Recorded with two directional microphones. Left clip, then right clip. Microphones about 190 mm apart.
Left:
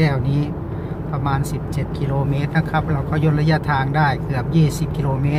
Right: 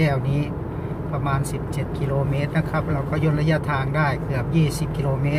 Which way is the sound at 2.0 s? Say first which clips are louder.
Left 1 dB; 15° left (ahead or behind).